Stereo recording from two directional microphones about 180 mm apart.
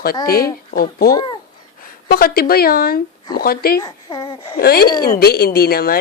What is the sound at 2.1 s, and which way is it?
A woman's voice, 55° left (ahead or behind).